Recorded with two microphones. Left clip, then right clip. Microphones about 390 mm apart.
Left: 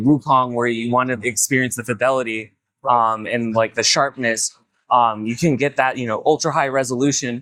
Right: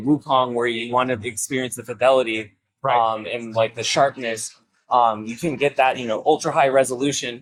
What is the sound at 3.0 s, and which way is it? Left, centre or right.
Speech, left.